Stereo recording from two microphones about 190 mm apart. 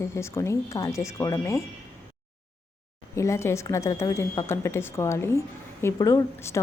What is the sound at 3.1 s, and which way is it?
Speech, 15° left (ahead or behind).